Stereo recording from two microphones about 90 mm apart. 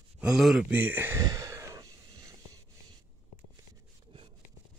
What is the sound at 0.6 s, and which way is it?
Speech, 20° right (ahead or behind).